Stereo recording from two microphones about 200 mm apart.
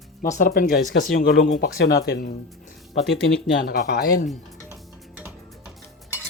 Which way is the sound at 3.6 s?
50° left (ahead or behind).